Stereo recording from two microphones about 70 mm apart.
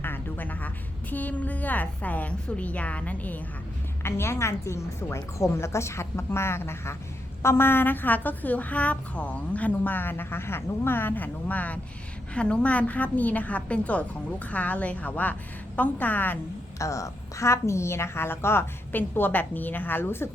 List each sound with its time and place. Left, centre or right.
0.0 s music: left
1.1 s a woman's voice: left
4.0 s a woman's voice: left
16.7 s a woman's voice: left